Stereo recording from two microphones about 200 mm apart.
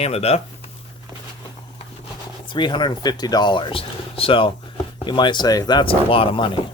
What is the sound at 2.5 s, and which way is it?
Speech, 25° left (ahead or behind).